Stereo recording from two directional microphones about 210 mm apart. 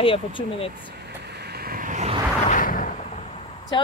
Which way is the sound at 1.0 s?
50° right (ahead or behind).